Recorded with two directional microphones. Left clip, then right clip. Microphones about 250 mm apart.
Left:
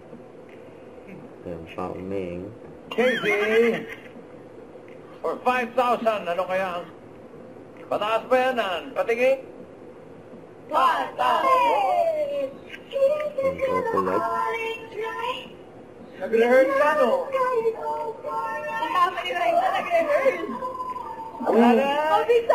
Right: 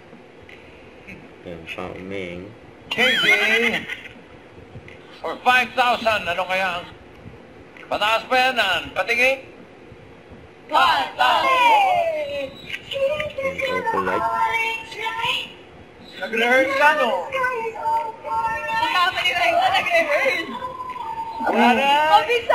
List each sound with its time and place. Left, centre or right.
1.8 s speech: right
3.0 s a man's voice: centre
5.2 s a man's voice: centre
7.9 s a man's voice: centre
10.7 s speech: centre
12.9 s music: centre
16.2 s a sound: centre
21.5 s a man's voice: centre